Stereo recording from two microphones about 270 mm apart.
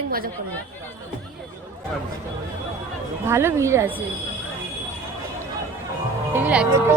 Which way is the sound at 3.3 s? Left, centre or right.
Centre.